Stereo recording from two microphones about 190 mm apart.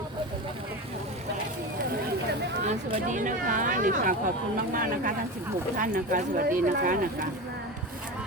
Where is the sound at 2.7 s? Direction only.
40° right (ahead or behind).